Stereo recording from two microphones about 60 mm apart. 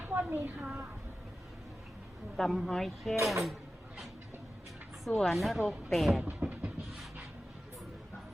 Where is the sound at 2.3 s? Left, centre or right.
Centre.